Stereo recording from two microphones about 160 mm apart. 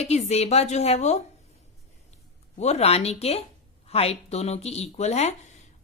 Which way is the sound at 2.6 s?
40° left (ahead or behind).